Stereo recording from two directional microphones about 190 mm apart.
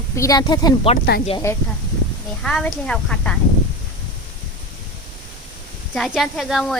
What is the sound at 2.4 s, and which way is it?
Speech, 5° left (ahead or behind).